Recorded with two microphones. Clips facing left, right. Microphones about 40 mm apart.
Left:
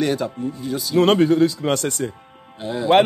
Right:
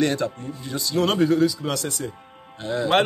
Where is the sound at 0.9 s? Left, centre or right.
Left.